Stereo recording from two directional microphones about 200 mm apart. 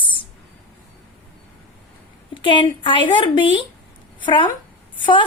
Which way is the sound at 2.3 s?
25° left (ahead or behind).